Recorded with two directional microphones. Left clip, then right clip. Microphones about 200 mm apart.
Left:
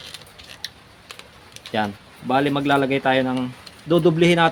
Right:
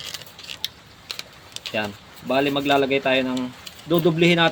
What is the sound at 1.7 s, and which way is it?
Speech, 50° left (ahead or behind).